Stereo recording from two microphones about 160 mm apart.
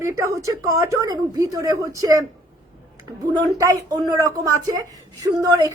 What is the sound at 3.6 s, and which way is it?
Speech, 20° right (ahead or behind).